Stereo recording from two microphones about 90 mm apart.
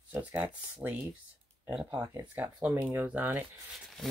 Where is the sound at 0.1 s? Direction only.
20° right (ahead or behind).